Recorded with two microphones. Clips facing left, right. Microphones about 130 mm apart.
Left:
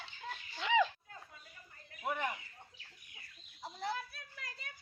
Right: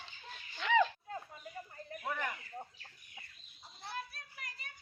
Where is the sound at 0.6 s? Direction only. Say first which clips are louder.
Right 1 dB; 15° left (ahead or behind).